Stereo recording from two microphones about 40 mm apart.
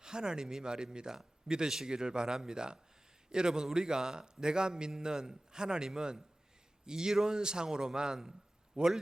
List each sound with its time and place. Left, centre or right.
0.0 s a man's voice: centre